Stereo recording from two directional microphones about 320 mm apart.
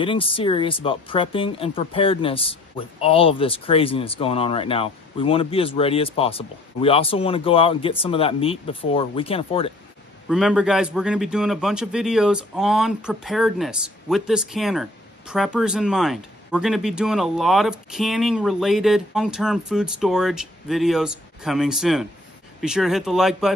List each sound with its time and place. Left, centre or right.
0.0 s speech: centre
10.2 s a man's voice: centre